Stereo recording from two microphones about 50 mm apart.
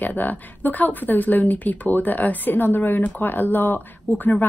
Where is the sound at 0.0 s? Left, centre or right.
Left.